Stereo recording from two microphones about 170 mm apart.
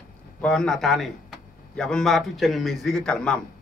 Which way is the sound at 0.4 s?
5° left (ahead or behind).